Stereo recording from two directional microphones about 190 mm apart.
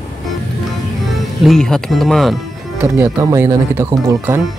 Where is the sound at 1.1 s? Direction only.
Centre (ahead or behind).